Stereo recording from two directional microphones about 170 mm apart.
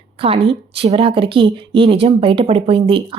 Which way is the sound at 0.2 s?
35° right (ahead or behind).